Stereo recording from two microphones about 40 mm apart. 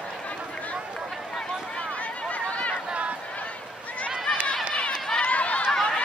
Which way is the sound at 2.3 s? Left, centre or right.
Left.